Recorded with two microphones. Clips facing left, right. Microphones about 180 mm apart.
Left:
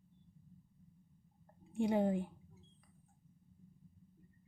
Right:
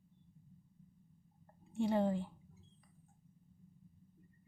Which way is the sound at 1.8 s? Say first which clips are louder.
Left 1 dB; 10° left (ahead or behind).